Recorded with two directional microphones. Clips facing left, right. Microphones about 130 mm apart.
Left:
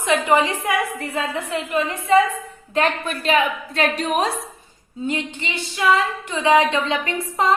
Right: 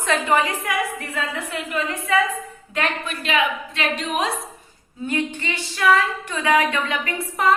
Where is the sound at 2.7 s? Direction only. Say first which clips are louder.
Left 5 dB; 35° left (ahead or behind).